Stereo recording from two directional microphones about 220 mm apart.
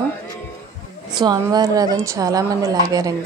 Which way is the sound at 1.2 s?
20° right (ahead or behind).